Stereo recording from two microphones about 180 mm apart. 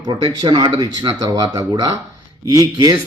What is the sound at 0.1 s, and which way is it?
Speech, 25° right (ahead or behind).